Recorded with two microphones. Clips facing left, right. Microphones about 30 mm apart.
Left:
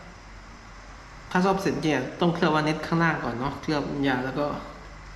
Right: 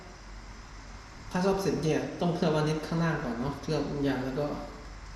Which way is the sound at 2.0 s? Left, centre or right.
Left.